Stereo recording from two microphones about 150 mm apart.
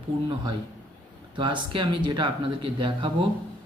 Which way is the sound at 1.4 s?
30° right (ahead or behind).